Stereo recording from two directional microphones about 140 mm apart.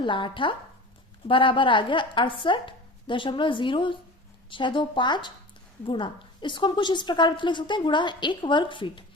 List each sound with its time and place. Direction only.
0.0 s a woman's voice: 35° left (ahead or behind)